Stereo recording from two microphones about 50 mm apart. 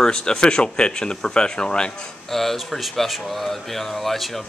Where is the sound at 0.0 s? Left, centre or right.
Centre.